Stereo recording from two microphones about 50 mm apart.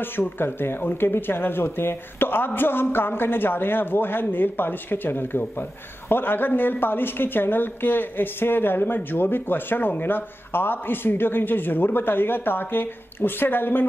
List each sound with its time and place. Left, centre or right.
0.0 s speech: left